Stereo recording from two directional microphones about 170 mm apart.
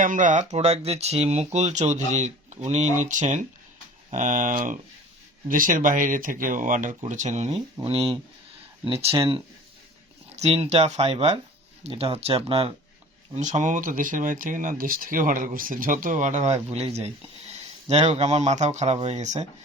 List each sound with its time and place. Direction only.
0.0 s speech: 50° right (ahead or behind); by 12.7 s 35° right (ahead or behind)
13.3 s speech: 45° right (ahead or behind)